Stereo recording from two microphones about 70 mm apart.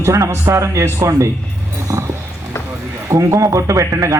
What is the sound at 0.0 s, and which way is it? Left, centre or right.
Speech, right.